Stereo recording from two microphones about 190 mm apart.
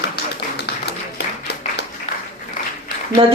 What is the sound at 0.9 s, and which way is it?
Applause, 60° left (ahead or behind).